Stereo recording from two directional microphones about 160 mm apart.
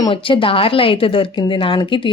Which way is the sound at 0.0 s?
35° left (ahead or behind).